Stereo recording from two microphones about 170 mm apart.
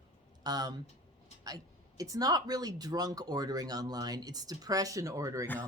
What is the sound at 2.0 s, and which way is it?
Speech, 20° right (ahead or behind).